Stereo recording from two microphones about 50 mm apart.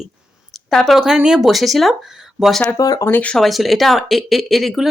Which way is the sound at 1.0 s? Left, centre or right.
Centre.